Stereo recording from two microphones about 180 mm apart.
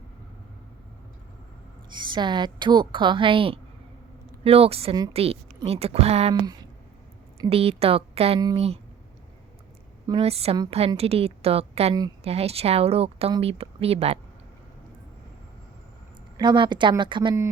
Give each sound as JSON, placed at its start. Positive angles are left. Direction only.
{"t": 1.9, "sound": "a woman's voice", "side_deg": -25}
{"t": 7.5, "sound": "speech", "side_deg": -35}
{"t": 10.1, "sound": "speech", "side_deg": -30}
{"t": 16.4, "sound": "a woman's voice", "side_deg": -25}